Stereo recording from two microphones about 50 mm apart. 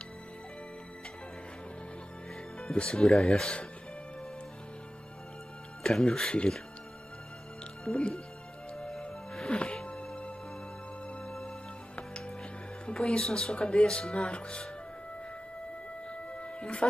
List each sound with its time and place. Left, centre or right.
2.6 s speech: centre
5.9 s speech: centre
7.8 s speech: centre
8.7 s music: centre
9.5 s music: centre
11.2 s music: centre
12.8 s speech: centre
16.1 s music: left